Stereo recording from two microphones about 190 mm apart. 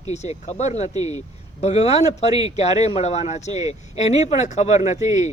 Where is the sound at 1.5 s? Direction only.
35° left (ahead or behind).